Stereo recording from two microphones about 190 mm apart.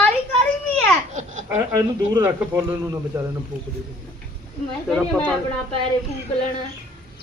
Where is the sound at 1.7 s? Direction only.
15° right (ahead or behind).